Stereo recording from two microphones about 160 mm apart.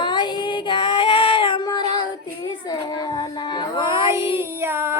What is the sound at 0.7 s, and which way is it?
Child singing, 35° left (ahead or behind).